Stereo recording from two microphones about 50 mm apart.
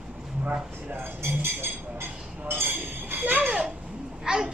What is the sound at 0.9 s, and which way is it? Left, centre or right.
Speech, right.